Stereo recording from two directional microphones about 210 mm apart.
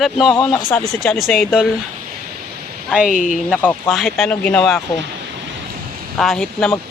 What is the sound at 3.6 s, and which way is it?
Speech, 5° left (ahead or behind).